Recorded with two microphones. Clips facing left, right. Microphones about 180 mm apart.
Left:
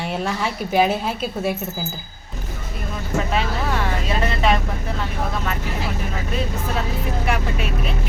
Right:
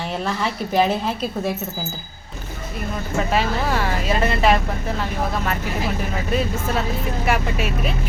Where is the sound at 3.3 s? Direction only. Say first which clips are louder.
Right 2 dB; 5° right (ahead or behind).